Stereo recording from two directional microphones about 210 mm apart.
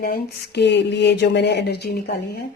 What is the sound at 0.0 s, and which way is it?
A woman's voice, 50° left (ahead or behind).